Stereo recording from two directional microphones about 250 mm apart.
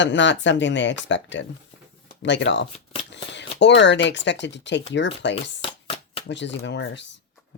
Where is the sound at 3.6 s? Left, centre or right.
Left.